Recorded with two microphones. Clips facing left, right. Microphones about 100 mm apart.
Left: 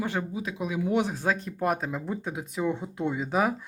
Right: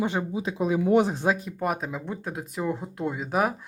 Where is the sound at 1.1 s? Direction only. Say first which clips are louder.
Right 3 dB; 25° right (ahead or behind).